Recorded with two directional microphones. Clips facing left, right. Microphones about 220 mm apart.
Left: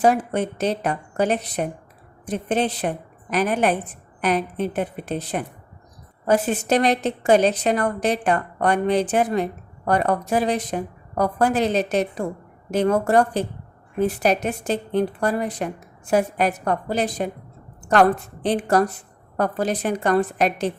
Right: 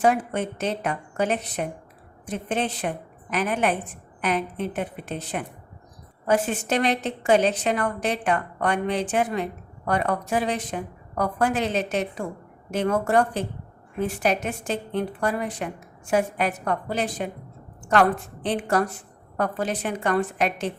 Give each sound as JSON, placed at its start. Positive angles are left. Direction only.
{"t": 0.0, "sound": "a woman's voice", "side_deg": 35}
{"t": 18.4, "sound": "a woman's voice", "side_deg": 40}